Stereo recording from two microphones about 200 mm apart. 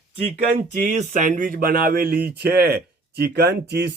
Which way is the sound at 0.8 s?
40° right (ahead or behind).